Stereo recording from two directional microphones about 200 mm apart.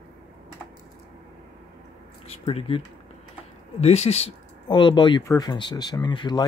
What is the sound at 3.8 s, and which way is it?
Speech, 30° left (ahead or behind).